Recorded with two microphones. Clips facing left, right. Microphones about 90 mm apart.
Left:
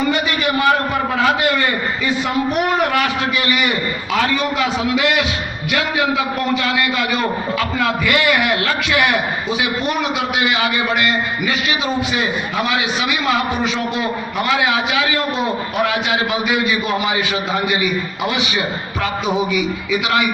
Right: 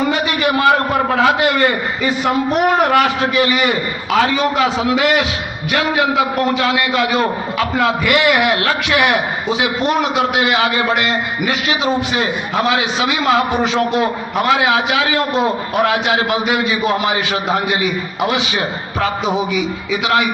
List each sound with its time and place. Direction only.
0.6 s a sound: 35° right (ahead or behind)
1.5 s a man's voice: 35° right (ahead or behind)
6.6 s a man's voice: 25° right (ahead or behind)
10.0 s a man's voice: 35° right (ahead or behind)